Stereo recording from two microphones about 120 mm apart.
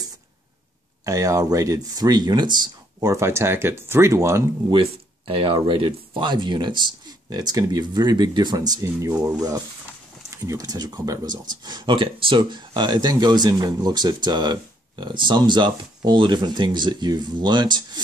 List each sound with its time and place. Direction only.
1.0 s speech: 25° right (ahead or behind)
4.6 s speech: 45° right (ahead or behind)